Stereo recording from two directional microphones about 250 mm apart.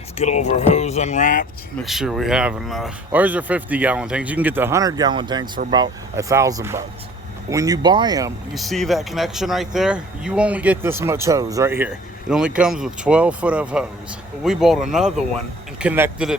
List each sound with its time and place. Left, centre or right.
0.2 s speech: left
1.8 s speech: centre
8.5 s speech: centre